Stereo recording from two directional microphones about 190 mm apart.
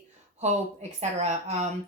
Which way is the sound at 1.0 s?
40° right (ahead or behind).